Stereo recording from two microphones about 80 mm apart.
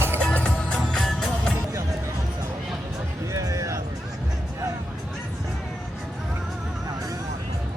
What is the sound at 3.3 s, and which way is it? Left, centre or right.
Music, right.